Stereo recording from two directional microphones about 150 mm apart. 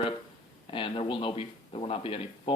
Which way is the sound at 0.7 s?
35° left (ahead or behind).